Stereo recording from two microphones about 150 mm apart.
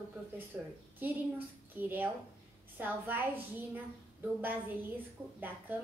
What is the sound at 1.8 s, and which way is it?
A woman's voice, 15° right (ahead or behind).